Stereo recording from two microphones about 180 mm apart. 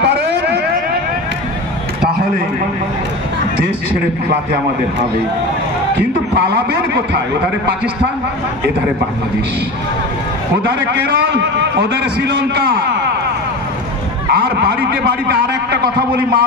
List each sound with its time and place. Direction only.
0.0 s vehicle: 70° right (ahead or behind)
6.3 s a man's voice: 65° right (ahead or behind)
10.7 s a man's voice: 60° right (ahead or behind)
14.3 s a sound: 60° right (ahead or behind)